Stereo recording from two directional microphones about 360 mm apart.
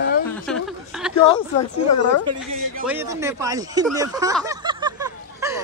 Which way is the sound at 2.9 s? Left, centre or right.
Centre.